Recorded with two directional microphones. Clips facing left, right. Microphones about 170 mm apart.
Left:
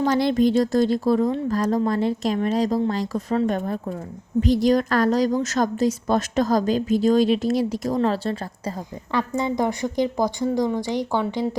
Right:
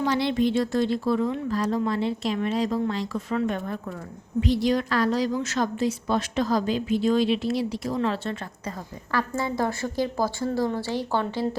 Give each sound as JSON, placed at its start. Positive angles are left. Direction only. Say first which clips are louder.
{"t": 0.0, "sound": "a woman's voice", "louder": "left 4 dB", "side_deg": 45}
{"t": 9.1, "sound": "a woman's voice", "louder": "left 3 dB", "side_deg": 20}